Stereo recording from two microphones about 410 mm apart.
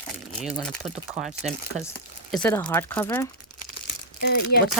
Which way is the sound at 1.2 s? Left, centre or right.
Centre.